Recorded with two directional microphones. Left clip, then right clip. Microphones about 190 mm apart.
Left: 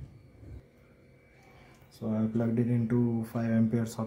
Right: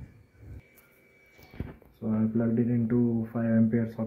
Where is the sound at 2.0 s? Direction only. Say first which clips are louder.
Right 2 dB; 15° left (ahead or behind).